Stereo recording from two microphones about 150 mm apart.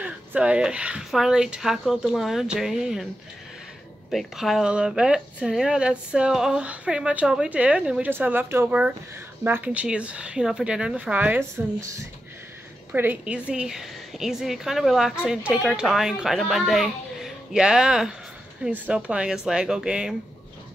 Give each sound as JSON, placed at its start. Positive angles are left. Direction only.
{"t": 0.0, "sound": "speech", "side_deg": -10}
{"t": 4.1, "sound": "speech", "side_deg": 0}